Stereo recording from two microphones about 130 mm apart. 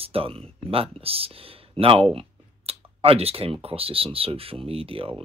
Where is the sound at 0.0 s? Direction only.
45° right (ahead or behind).